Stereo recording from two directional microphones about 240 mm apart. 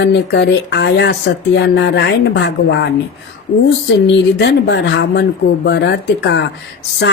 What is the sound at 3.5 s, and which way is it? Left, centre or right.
Speech, left.